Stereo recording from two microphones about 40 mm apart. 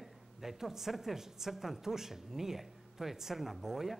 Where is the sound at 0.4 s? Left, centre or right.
Centre.